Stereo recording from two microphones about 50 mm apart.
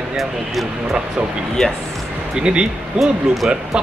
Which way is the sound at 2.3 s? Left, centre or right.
Centre.